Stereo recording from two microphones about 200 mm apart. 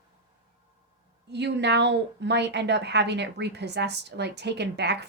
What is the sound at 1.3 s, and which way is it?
A woman's voice, 60° right (ahead or behind).